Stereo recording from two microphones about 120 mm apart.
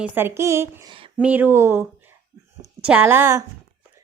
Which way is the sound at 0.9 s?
45° right (ahead or behind).